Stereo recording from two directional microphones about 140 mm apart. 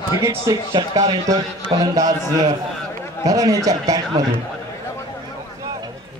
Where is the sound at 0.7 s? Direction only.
35° right (ahead or behind).